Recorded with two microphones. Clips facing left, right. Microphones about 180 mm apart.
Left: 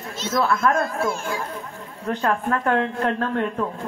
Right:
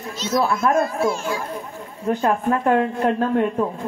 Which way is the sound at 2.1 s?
10° right (ahead or behind).